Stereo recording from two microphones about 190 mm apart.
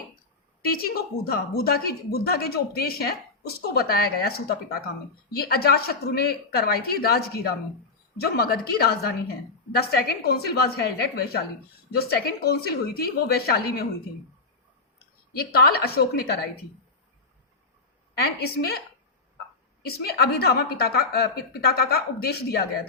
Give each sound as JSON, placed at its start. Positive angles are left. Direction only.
{"t": 0.6, "sound": "a woman's voice", "side_deg": 55}
{"t": 15.3, "sound": "a woman's voice", "side_deg": 55}
{"t": 18.2, "sound": "a woman's voice", "side_deg": 55}
{"t": 19.8, "sound": "a woman's voice", "side_deg": 55}